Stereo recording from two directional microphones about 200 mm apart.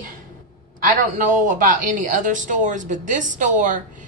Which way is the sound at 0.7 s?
40° right (ahead or behind).